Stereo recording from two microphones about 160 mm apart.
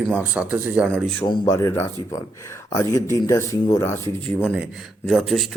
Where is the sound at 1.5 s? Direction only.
15° left (ahead or behind).